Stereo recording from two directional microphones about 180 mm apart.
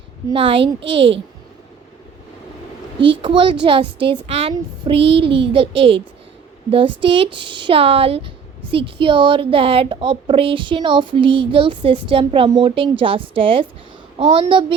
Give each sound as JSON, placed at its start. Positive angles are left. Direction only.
{"t": 0.3, "sound": "a child's voice", "side_deg": -30}
{"t": 0.9, "sound": "a woman's voice", "side_deg": -85}
{"t": 3.1, "sound": "a child's voice", "side_deg": -30}